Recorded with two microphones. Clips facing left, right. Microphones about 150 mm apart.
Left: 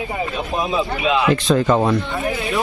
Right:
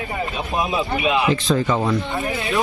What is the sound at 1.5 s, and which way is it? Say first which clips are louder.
Speech: left 4 dB; 55° left (ahead or behind).